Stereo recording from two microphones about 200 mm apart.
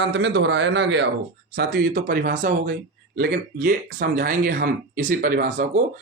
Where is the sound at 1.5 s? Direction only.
50° right (ahead or behind).